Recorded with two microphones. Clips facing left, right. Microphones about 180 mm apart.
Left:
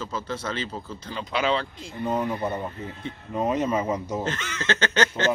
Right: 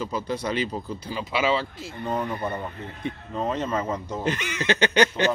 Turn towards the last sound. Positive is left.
turn(degrees=-15)  # may be behind; listen again after turning